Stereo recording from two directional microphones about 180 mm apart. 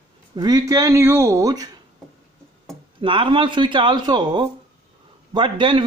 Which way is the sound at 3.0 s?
25° right (ahead or behind).